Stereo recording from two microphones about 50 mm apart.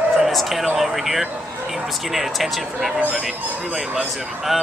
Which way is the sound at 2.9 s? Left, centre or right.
Right.